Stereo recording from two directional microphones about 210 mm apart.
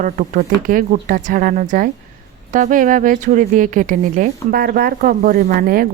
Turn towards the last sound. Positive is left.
turn(degrees=-45)  # may be behind; listen again after turning